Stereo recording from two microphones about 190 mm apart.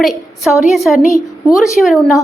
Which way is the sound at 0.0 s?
Centre (ahead or behind).